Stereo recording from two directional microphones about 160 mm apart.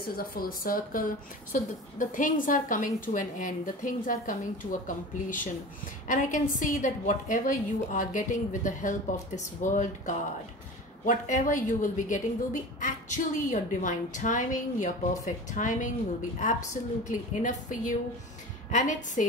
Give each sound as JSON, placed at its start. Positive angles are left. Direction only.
{"t": 0.0, "sound": "a woman's voice", "side_deg": 70}